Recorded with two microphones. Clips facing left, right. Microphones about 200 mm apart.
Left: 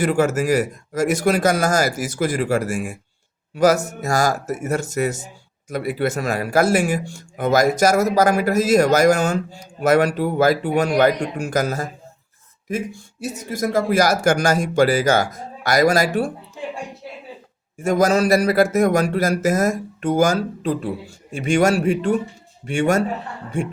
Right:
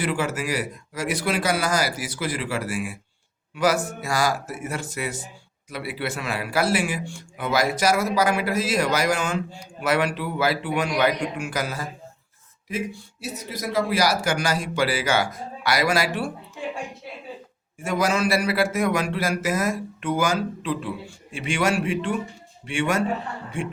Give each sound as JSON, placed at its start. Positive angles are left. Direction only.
{"t": 0.0, "sound": "speech", "side_deg": 45}
{"t": 17.7, "sound": "speech", "side_deg": 45}